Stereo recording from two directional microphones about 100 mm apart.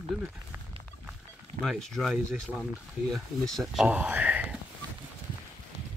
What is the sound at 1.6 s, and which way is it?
Speech, 5° left (ahead or behind).